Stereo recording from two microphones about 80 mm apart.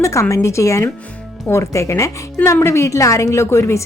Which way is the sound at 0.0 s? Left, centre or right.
Left.